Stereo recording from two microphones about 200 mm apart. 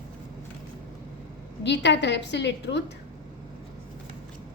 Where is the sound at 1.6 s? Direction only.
60° left (ahead or behind).